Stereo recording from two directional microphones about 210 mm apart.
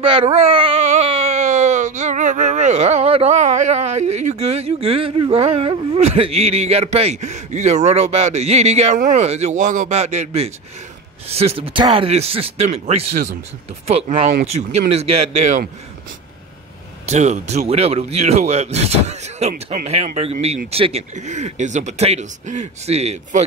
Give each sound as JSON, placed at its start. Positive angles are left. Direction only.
{"t": 0.0, "sound": "speech", "side_deg": -25}
{"t": 17.0, "sound": "speech", "side_deg": -35}